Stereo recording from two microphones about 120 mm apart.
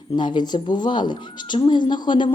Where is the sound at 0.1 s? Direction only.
40° left (ahead or behind).